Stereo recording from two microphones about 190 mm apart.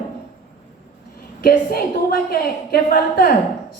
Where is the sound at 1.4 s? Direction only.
50° left (ahead or behind).